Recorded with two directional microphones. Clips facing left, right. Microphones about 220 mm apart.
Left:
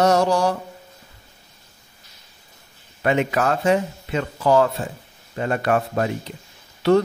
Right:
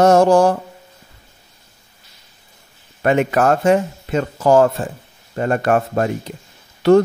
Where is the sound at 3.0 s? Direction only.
50° right (ahead or behind).